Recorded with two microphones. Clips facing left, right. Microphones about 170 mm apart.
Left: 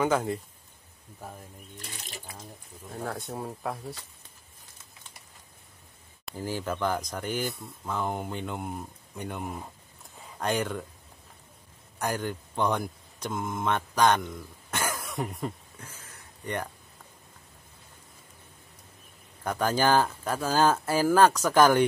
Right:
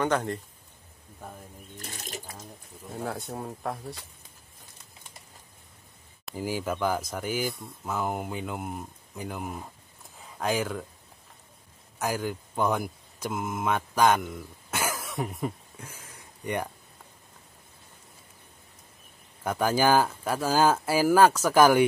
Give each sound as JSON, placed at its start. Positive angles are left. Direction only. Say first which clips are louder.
{"t": 0.0, "sound": "speech", "louder": "left 1 dB", "side_deg": 5}
{"t": 1.8, "sound": "speech", "louder": "right 4 dB", "side_deg": -45}
{"t": 2.9, "sound": "speech", "louder": "right 1 dB", "side_deg": 0}
{"t": 6.3, "sound": "speech", "louder": "right 2 dB", "side_deg": -10}
{"t": 12.0, "sound": "speech", "louder": "right 1 dB", "side_deg": -5}
{"t": 19.4, "sound": "speech", "louder": "right 1 dB", "side_deg": -10}